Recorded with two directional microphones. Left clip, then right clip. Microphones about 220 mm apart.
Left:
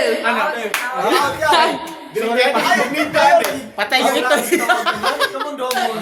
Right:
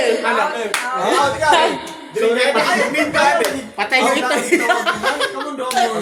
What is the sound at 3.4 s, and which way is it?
Speech, 15° left (ahead or behind).